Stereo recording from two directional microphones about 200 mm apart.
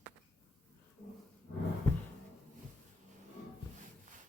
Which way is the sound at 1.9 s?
10° left (ahead or behind).